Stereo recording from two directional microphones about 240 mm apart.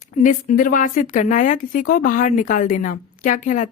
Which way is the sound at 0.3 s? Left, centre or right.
Left.